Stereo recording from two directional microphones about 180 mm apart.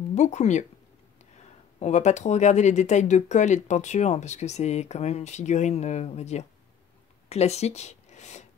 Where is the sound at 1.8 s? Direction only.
40° left (ahead or behind).